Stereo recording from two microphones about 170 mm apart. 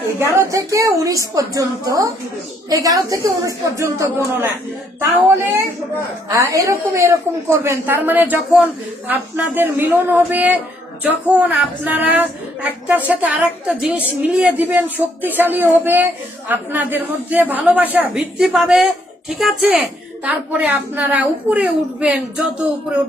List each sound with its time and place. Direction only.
0.2 s a woman's voice: 15° right (ahead or behind)
6.2 s a woman's voice: 20° right (ahead or behind)